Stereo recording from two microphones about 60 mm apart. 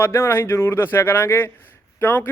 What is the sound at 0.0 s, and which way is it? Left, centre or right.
Speech, left.